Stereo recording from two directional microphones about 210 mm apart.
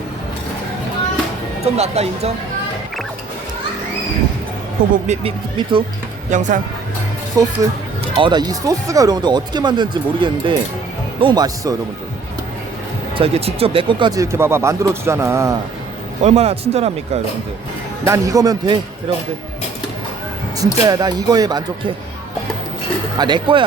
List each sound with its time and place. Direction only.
1.6 s speech: 30° right (ahead or behind)
5.0 s speech: 25° right (ahead or behind)
6.3 s a man's voice: 35° right (ahead or behind)
7.3 s a man's voice: 15° right (ahead or behind)
13.1 s speech: 30° right (ahead or behind)
14.3 s a man's voice: 10° right (ahead or behind)
16.2 s a man's voice: 30° right (ahead or behind)
18.0 s a man's voice: 15° right (ahead or behind)
20.6 s speech: 20° right (ahead or behind)
23.1 s speech: 20° right (ahead or behind)